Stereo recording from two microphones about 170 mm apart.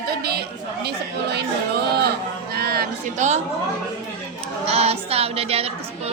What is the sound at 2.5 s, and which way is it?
Speech, 65° right (ahead or behind).